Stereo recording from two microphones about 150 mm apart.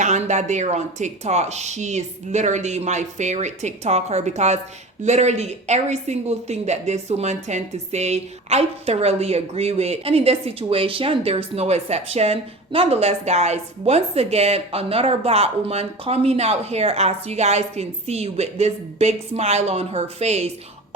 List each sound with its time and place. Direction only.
0.0 s a woman's voice: 50° right (ahead or behind)